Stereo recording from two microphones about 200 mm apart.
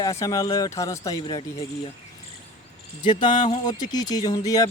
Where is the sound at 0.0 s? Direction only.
15° left (ahead or behind).